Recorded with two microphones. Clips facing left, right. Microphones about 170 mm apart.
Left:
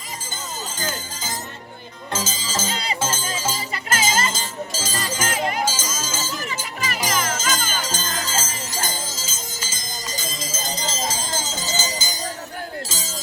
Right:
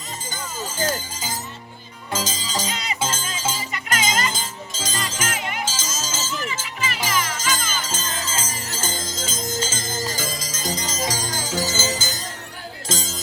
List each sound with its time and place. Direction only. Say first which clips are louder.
2.1 s music: right 1 dB; centre (ahead or behind)
2.6 s music: left 2 dB; 30° left (ahead or behind)
3.9 s music: left 1 dB; 30° left (ahead or behind)
4.3 s music: left 3 dB; centre (ahead or behind)
5.2 s music: left 6 dB; 35° left (ahead or behind)
5.6 s music: left 3 dB; 10° left (ahead or behind)
6.3 s music: even; 40° left (ahead or behind)
8.9 s music: right 2 dB; 5° left (ahead or behind)
10.5 s music: right 1 dB; 25° left (ahead or behind)